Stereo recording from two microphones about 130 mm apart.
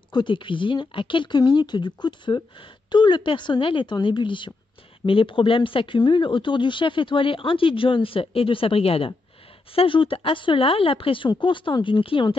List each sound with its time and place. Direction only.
0.1 s speech: 35° left (ahead or behind)